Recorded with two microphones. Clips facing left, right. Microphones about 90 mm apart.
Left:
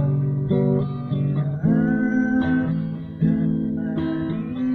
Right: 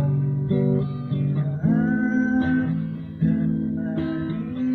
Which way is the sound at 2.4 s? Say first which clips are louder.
Left 1 dB; 45° left (ahead or behind).